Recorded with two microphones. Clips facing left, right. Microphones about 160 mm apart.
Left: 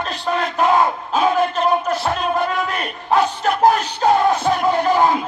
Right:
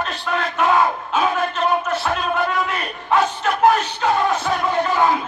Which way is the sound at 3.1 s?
35° left (ahead or behind).